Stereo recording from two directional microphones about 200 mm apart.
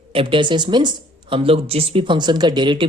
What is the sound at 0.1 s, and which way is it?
Speech, 25° right (ahead or behind).